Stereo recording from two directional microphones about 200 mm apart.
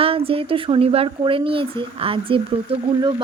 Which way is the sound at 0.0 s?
30° right (ahead or behind).